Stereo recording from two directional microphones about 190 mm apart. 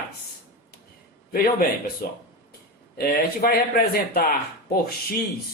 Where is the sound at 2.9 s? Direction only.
50° left (ahead or behind).